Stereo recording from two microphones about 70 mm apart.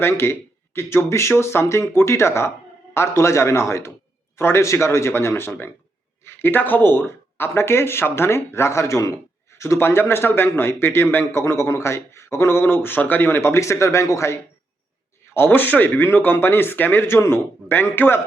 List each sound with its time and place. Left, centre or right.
0.0 s speech: left
15.3 s speech: left